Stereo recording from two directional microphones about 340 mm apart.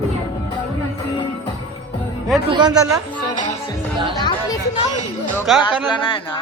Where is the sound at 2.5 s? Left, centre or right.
Centre.